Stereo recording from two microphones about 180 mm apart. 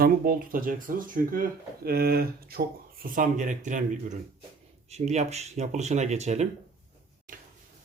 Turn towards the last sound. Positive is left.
turn(degrees=-40)  # may be behind; listen again after turning